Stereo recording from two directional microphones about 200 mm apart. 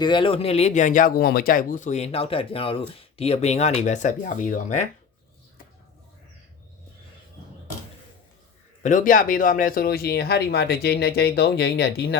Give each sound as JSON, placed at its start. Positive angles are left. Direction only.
{"t": 0.0, "sound": "speech", "side_deg": 25}
{"t": 8.8, "sound": "speech", "side_deg": 40}